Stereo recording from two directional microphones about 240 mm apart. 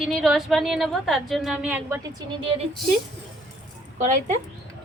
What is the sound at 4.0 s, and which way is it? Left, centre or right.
Speech, right.